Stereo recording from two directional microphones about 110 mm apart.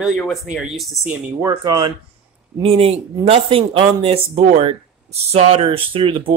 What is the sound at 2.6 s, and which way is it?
Speech, 60° right (ahead or behind).